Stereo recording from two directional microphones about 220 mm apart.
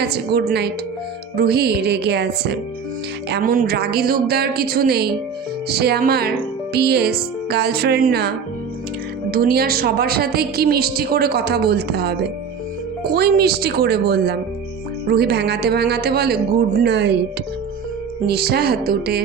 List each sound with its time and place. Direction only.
0.0 s a woman's voice: 45° right (ahead or behind)
18.3 s a woman's voice: 45° right (ahead or behind)